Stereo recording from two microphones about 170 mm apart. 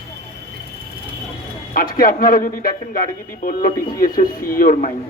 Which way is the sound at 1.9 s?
55° left (ahead or behind).